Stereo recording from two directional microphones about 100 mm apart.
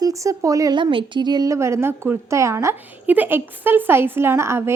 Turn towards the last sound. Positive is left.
turn(degrees=-25)  # may be behind; listen again after turning